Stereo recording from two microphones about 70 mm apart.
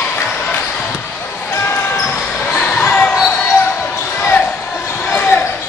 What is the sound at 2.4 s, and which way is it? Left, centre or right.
Basketball bounce, centre.